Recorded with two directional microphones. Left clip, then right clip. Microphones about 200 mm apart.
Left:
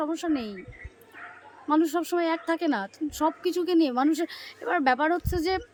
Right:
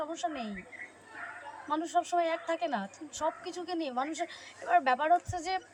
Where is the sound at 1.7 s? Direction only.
30° left (ahead or behind).